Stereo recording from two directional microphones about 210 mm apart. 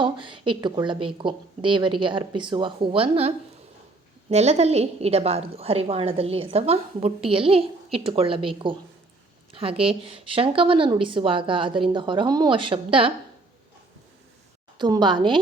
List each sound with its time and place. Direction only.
0.0 s a woman's voice: 25° right (ahead or behind)
14.8 s a woman's voice: 20° right (ahead or behind)